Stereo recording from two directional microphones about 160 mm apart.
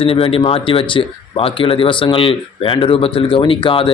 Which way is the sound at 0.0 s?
35° left (ahead or behind).